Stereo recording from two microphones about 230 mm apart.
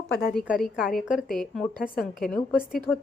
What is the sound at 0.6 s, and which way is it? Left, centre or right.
A woman's voice, centre.